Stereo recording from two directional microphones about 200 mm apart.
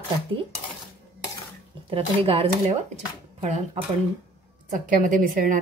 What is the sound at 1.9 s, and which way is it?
A woman's voice, 25° right (ahead or behind).